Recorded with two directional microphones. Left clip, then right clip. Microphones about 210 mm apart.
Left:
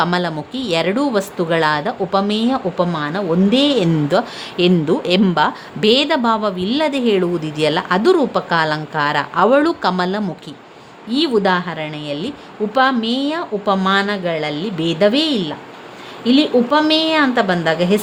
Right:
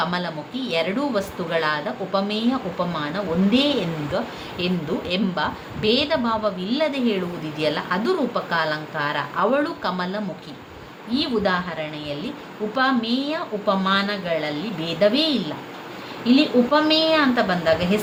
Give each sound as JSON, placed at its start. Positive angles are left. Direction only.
{"t": 0.0, "sound": "a woman's voice", "side_deg": 55}